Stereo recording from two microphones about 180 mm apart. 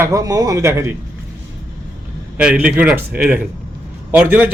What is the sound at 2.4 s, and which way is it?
A man's voice, 5° right (ahead or behind).